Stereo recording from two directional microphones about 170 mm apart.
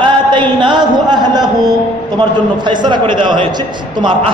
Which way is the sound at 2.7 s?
25° right (ahead or behind).